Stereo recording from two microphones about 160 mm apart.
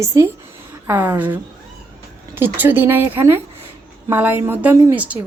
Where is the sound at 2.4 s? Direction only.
10° right (ahead or behind).